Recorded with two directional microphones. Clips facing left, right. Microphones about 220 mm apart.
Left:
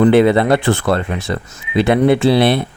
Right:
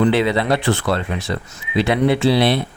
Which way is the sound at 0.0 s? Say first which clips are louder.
Left 6 dB; 50° left (ahead or behind).